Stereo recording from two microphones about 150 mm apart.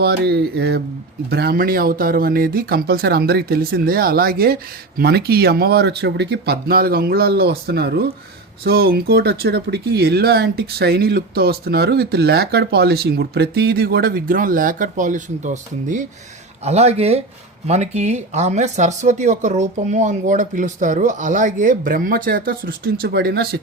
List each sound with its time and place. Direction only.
0.0 s speech: 90° right; by 16.0 s 55° right (ahead or behind)
16.6 s speech: 45° right (ahead or behind); by 23.6 s 90° right